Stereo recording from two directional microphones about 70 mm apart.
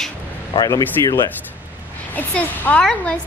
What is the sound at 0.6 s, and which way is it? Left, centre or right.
Speech, left.